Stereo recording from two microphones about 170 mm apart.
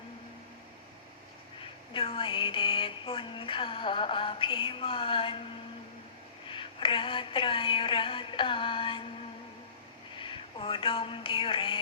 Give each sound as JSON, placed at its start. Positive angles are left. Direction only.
{"t": 1.9, "sound": "speech", "side_deg": 30}
{"t": 6.5, "sound": "speech", "side_deg": 30}
{"t": 10.2, "sound": "speech", "side_deg": 30}